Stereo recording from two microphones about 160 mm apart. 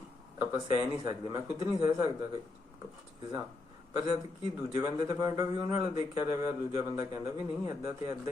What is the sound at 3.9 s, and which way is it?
Speech, 30° right (ahead or behind).